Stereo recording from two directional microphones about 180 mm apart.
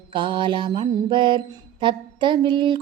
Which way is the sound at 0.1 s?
25° right (ahead or behind).